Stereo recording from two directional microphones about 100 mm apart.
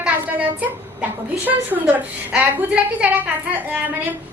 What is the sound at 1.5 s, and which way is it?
A woman's voice, 15° right (ahead or behind).